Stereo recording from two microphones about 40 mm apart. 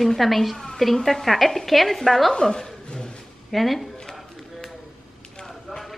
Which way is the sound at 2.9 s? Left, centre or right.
Centre.